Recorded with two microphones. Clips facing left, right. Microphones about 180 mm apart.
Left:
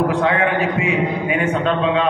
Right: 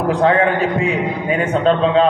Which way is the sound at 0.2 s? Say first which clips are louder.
Right 3 dB; 35° right (ahead or behind).